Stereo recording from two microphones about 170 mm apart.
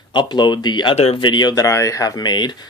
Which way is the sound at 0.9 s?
35° left (ahead or behind).